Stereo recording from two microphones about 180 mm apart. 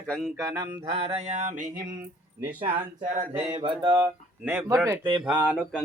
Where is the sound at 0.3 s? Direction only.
20° right (ahead or behind).